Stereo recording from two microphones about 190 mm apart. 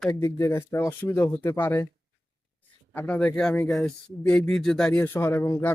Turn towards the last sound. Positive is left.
turn(degrees=10)  # may be behind; listen again after turning